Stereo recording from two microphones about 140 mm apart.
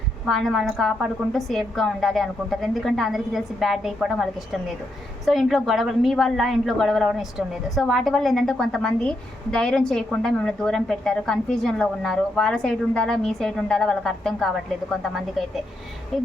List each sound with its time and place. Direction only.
0.3 s a woman's voice: centre (ahead or behind)